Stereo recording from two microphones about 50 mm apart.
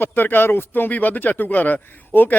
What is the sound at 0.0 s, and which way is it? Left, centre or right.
Speech, left.